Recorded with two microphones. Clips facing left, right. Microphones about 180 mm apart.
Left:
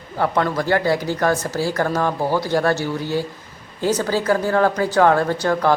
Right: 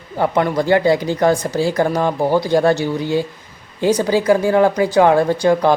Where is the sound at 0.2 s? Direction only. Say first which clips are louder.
Right 3 dB; 15° right (ahead or behind).